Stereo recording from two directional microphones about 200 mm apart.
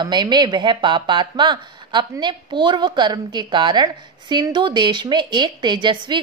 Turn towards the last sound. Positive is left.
turn(degrees=-25)  # may be behind; listen again after turning